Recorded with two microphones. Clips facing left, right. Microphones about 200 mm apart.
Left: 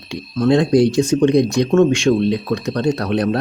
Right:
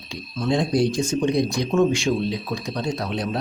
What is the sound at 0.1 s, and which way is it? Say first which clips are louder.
Speech: left 8 dB; 70° left (ahead or behind).